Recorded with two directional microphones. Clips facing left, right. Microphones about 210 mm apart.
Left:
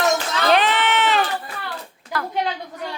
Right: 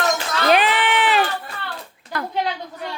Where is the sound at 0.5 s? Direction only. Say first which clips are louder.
Even; 15° right (ahead or behind).